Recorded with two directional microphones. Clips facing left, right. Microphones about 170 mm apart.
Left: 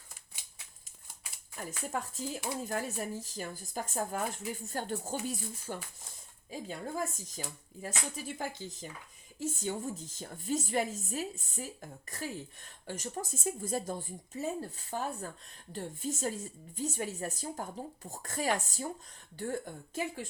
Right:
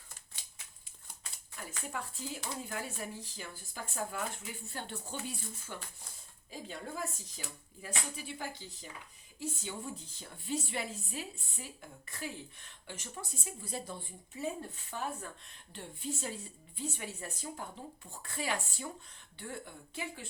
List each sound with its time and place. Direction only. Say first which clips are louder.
1.5 s a woman's voice: left 5 dB; 45° left (ahead or behind)